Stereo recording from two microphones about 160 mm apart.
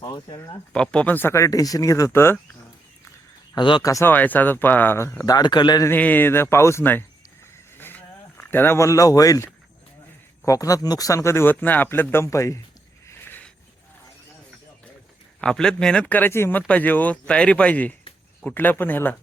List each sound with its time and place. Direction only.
0.0 s speech: 30° left (ahead or behind)
0.7 s speech: 5° left (ahead or behind)
3.5 s speech: 30° left (ahead or behind)
5.9 s speech: 10° left (ahead or behind)
7.8 s a sound: 10° left (ahead or behind)
10.4 s speech: 20° left (ahead or behind)
13.1 s a sound: 10° left (ahead or behind)
15.4 s speech: 5° left (ahead or behind)